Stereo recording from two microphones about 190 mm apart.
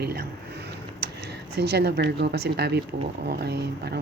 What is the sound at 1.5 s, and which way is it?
A woman's voice, 60° right (ahead or behind).